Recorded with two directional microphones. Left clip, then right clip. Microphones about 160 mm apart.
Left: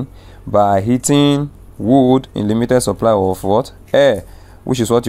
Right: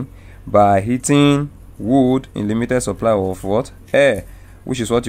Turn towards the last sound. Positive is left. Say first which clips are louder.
# left 4 dB
turn(degrees=20)  # may be behind; listen again after turning